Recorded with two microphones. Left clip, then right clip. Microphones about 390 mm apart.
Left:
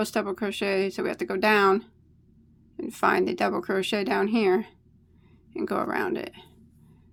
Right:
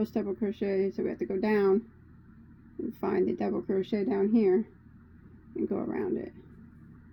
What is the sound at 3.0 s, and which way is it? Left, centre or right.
Speech, left.